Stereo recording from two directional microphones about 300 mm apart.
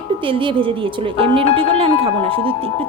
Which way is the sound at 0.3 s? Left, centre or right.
Centre.